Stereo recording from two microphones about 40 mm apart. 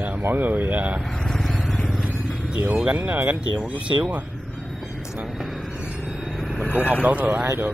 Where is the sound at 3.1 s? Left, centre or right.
Right.